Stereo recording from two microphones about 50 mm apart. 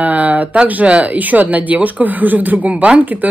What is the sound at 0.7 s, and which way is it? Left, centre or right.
Speech, right.